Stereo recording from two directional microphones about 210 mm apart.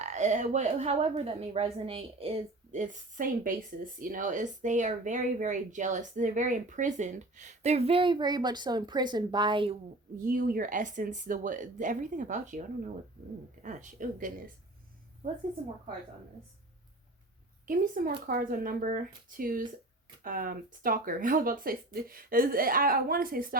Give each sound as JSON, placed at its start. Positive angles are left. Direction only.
{"t": 0.0, "sound": "speech", "side_deg": -35}
{"t": 10.2, "sound": "speech", "side_deg": -40}
{"t": 17.7, "sound": "speech", "side_deg": -40}